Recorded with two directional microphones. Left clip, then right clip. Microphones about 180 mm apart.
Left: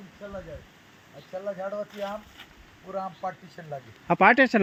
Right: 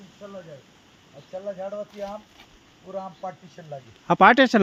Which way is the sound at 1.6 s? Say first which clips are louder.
Even; 10° right (ahead or behind).